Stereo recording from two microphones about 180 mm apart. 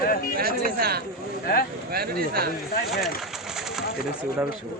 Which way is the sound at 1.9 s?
55° right (ahead or behind).